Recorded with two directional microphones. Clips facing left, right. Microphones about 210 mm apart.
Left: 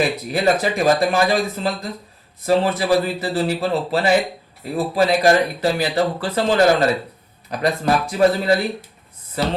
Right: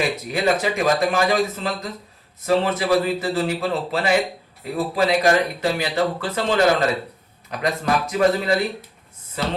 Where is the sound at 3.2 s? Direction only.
35° left (ahead or behind).